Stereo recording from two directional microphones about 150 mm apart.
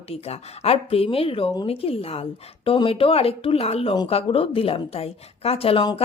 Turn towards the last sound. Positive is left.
turn(degrees=40)  # may be behind; listen again after turning